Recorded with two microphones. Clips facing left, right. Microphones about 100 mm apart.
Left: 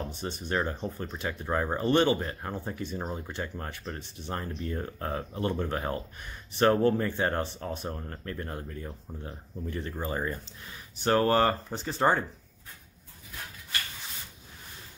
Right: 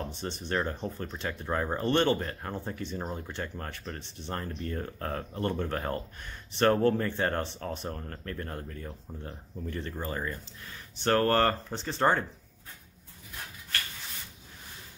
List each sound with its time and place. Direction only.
0.0 s speech: 5° left (ahead or behind)
10.1 s speech: 20° left (ahead or behind)
11.0 s speech: 10° left (ahead or behind)